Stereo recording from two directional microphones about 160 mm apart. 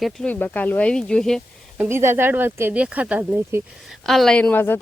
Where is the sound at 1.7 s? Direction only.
15° right (ahead or behind).